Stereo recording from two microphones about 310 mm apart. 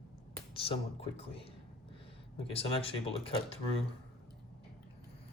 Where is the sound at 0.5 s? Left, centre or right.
Centre.